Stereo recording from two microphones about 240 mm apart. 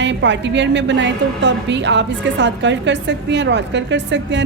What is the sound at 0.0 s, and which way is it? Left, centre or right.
A woman's voice, right.